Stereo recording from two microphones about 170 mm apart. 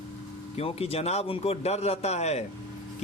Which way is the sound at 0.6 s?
35° left (ahead or behind).